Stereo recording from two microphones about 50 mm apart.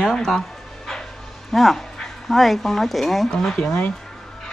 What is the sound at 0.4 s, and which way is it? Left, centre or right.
Dog, centre.